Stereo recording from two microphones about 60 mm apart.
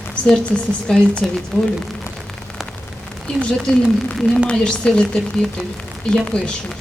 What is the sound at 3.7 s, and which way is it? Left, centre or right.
A woman's voice, centre.